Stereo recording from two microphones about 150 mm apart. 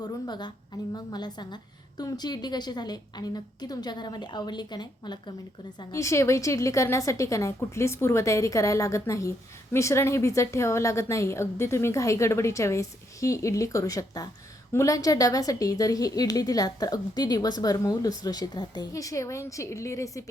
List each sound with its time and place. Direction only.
0.0 s a woman's voice: 30° left (ahead or behind)
5.9 s a woman's voice: 20° left (ahead or behind)